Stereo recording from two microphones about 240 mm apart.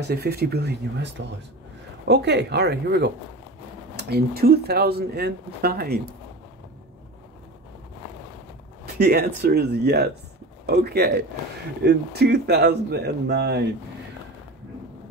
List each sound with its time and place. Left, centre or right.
0.0 s speech: right
8.9 s speech: right